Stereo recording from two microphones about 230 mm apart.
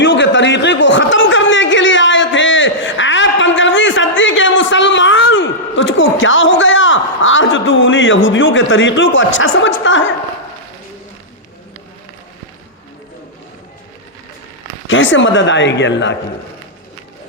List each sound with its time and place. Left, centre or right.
0.0 s a sound: left
9.8 s speech: left
14.8 s speech: left